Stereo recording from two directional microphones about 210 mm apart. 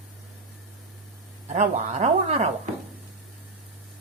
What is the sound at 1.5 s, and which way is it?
Speech, 35° right (ahead or behind).